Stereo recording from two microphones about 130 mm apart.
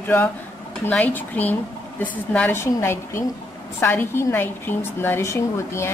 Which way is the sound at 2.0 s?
10° left (ahead or behind).